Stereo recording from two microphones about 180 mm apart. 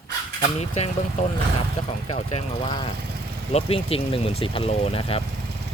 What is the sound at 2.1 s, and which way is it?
Speech, 30° left (ahead or behind).